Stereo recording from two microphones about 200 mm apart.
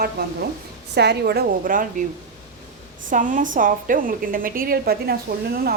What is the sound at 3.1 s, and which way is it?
A woman's voice, 40° right (ahead or behind).